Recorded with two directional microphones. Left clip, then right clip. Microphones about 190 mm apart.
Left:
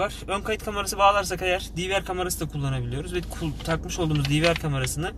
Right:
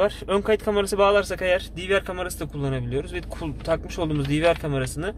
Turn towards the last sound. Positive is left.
turn(degrees=-40)  # may be behind; listen again after turning